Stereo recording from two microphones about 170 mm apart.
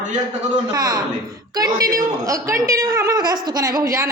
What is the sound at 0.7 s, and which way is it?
Speech, 20° right (ahead or behind).